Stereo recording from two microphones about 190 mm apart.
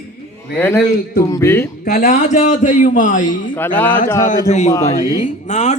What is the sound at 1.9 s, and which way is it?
A man's voice, 45° left (ahead or behind).